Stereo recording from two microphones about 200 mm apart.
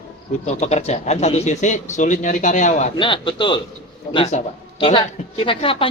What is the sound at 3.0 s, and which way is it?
Speech, 25° left (ahead or behind).